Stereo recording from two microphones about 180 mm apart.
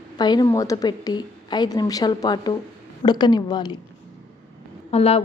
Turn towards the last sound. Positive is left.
turn(degrees=35)  # may be behind; listen again after turning